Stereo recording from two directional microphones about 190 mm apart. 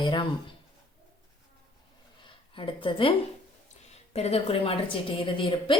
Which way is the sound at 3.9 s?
35° left (ahead or behind).